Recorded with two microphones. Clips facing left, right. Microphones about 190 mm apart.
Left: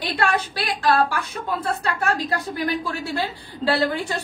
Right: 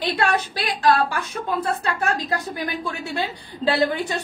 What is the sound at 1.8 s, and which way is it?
A woman's voice, 20° right (ahead or behind).